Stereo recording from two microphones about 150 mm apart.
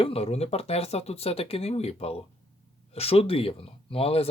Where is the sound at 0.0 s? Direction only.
40° left (ahead or behind).